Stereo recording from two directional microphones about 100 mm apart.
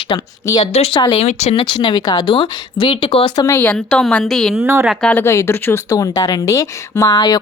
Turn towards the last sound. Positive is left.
turn(degrees=40)  # may be behind; listen again after turning